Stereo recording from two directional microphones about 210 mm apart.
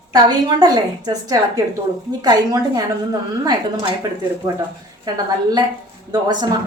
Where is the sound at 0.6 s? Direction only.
20° right (ahead or behind).